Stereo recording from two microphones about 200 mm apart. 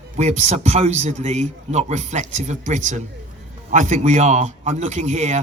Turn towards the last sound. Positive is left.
turn(degrees=-35)  # may be behind; listen again after turning